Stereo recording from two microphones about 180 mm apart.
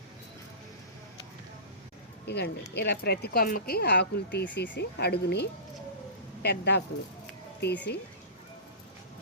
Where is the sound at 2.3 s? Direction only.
65° left (ahead or behind).